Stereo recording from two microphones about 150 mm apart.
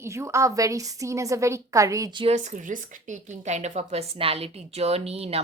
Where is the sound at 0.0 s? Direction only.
20° right (ahead or behind).